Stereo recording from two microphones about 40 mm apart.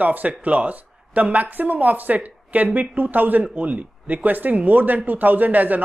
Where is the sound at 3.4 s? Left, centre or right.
Right.